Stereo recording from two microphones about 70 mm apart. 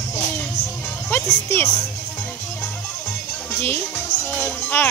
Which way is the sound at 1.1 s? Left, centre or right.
Left.